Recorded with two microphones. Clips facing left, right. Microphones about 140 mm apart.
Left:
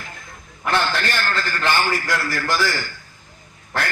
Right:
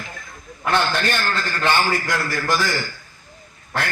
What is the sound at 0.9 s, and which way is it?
A man's voice, 15° right (ahead or behind).